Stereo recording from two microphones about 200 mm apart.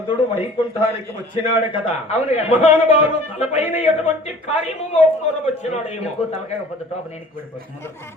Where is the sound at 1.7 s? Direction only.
35° left (ahead or behind).